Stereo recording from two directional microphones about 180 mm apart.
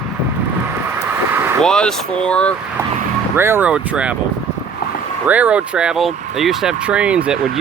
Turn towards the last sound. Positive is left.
turn(degrees=-5)  # may be behind; listen again after turning